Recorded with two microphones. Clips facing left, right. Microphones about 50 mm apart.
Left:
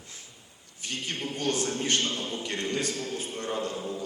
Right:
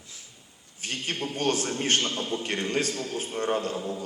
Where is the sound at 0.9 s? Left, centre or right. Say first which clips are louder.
Right 2 dB; right.